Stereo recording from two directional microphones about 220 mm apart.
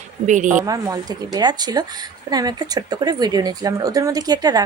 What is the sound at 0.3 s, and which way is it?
Speech, 35° right (ahead or behind).